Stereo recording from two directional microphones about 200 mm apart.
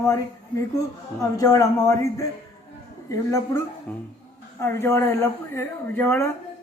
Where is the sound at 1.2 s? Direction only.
15° left (ahead or behind).